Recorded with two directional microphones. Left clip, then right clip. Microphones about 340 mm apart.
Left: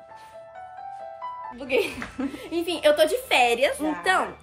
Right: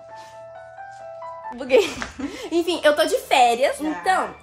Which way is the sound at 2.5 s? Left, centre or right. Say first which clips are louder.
Right 2 dB; centre.